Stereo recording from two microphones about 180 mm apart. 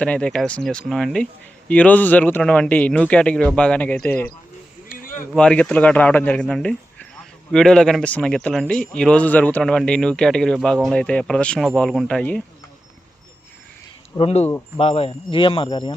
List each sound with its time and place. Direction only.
0.0 s speech: 5° left (ahead or behind)
4.9 s a sound: 50° left (ahead or behind)
5.3 s a man's voice: 5° left (ahead or behind)
14.2 s speech: 35° left (ahead or behind)